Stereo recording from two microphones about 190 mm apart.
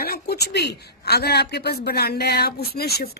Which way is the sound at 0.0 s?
55° left (ahead or behind).